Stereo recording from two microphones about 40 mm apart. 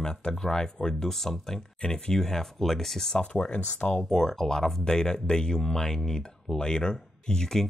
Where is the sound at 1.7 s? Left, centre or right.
Left.